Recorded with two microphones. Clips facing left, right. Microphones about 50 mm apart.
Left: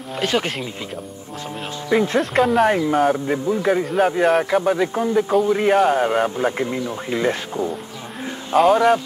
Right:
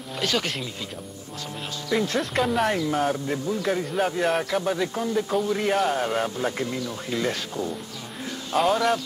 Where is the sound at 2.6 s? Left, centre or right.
Left.